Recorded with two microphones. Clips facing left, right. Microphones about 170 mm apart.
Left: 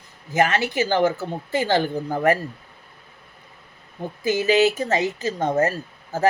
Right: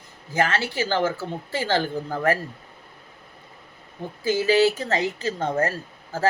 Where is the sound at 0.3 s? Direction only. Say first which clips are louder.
Left 3 dB; 20° left (ahead or behind).